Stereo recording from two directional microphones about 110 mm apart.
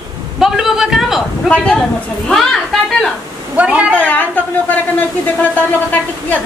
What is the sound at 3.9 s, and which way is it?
Speech, 15° left (ahead or behind).